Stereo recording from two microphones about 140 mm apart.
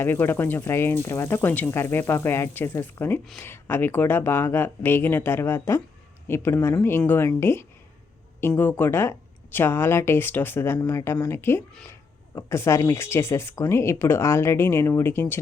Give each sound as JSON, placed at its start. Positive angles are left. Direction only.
{"t": 0.0, "sound": "speech", "side_deg": 15}